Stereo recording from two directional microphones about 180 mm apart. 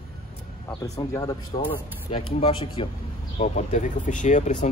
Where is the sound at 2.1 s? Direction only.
30° left (ahead or behind).